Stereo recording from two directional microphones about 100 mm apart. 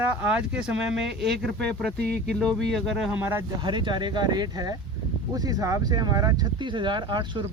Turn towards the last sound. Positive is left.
turn(degrees=-50)  # may be behind; listen again after turning